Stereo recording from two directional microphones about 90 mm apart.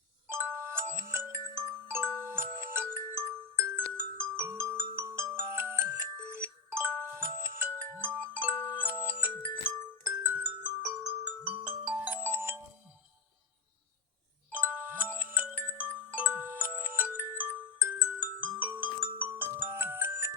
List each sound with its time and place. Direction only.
0.3 s glockenspiel: 30° right (ahead or behind)
8.2 s music: 20° right (ahead or behind)
10.0 s glockenspiel: 20° right (ahead or behind)
10.8 s marimba: 20° right (ahead or behind)
12.3 s music: 25° right (ahead or behind)
14.5 s glockenspiel: 20° right (ahead or behind)